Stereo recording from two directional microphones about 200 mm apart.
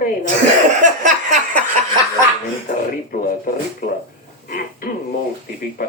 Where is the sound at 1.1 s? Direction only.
40° right (ahead or behind).